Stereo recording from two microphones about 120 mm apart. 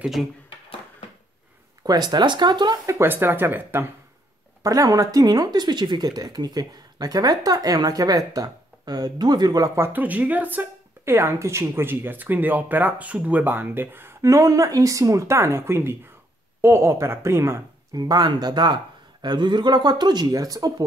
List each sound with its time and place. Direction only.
1.8 s speech: 35° right (ahead or behind)
2.9 s speech: 20° right (ahead or behind)
4.6 s speech: 30° right (ahead or behind)
9.8 s speech: 15° right (ahead or behind); by 20.7 s 30° right (ahead or behind)